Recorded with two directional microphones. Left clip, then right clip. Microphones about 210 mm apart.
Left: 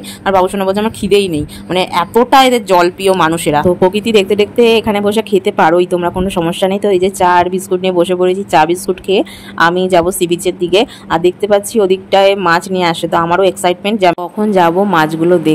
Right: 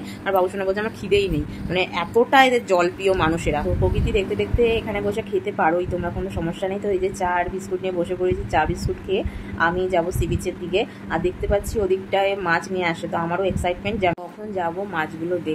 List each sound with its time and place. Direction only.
0.2 s speech: 35° left (ahead or behind)